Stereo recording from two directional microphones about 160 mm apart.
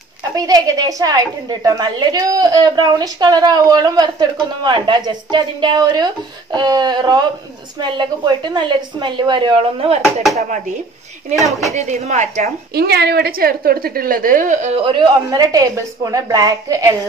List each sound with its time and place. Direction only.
0.3 s a woman's voice: 20° right (ahead or behind)
11.7 s speech: 45° right (ahead or behind)
12.7 s a woman's voice: 90° right; by 14.7 s 55° right (ahead or behind)
14.9 s a woman's voice: 25° right (ahead or behind)